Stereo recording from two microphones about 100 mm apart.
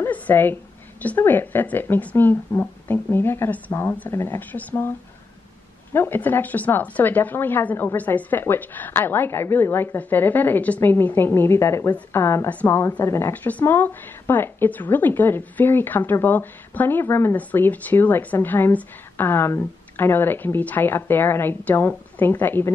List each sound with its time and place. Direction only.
0.0 s a sound: 20° left (ahead or behind)
1.0 s speech: 20° left (ahead or behind)
5.9 s speech: 20° left (ahead or behind)
12.4 s a woman's voice: 15° left (ahead or behind)
13.0 s speech: 30° left (ahead or behind)
13.3 s speech: 15° left (ahead or behind)